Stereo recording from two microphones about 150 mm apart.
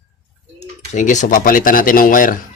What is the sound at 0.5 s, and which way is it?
Speech, 50° left (ahead or behind).